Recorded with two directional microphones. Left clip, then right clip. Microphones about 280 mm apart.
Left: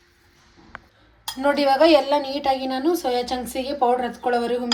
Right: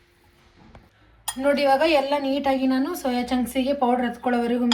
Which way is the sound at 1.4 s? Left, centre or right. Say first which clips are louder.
Left 2 dB; left.